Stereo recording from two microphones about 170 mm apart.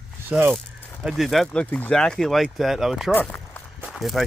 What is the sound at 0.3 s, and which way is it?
Speech, 10° right (ahead or behind).